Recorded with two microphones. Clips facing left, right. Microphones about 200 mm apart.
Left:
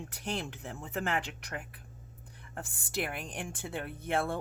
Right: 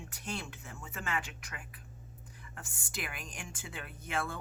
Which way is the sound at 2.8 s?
60° left (ahead or behind).